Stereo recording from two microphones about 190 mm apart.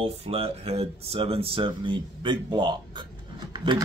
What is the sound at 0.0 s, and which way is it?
Speech, 30° right (ahead or behind).